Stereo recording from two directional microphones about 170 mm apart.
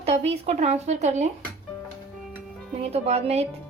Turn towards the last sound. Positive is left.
turn(degrees=-35)  # may be behind; listen again after turning